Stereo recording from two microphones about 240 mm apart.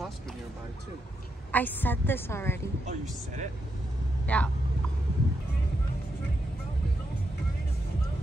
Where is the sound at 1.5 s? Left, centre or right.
Centre.